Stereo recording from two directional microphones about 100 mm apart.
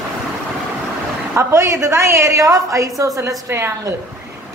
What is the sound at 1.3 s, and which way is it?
A man's voice, 30° right (ahead or behind).